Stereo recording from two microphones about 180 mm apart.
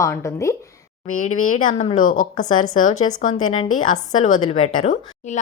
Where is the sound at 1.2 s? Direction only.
45° left (ahead or behind).